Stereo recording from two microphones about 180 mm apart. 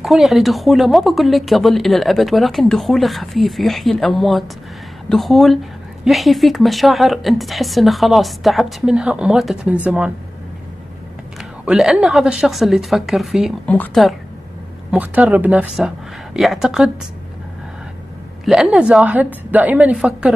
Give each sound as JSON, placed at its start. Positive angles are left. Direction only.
{"t": 0.0, "sound": "a woman's voice", "side_deg": 0}
{"t": 11.6, "sound": "a woman's voice", "side_deg": 0}
{"t": 18.4, "sound": "a woman's voice", "side_deg": -5}